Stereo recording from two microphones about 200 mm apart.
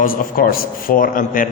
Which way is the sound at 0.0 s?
45° left (ahead or behind).